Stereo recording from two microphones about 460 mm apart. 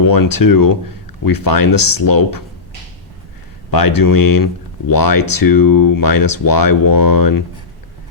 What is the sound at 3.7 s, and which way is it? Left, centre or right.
Speech, left.